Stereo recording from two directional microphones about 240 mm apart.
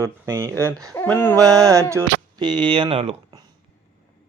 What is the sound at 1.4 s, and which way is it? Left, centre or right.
Mantra, centre.